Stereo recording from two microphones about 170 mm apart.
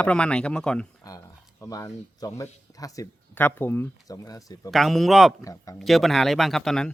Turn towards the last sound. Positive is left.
turn(degrees=5)  # may be behind; listen again after turning